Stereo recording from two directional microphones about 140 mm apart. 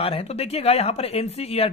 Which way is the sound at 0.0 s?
45° left (ahead or behind).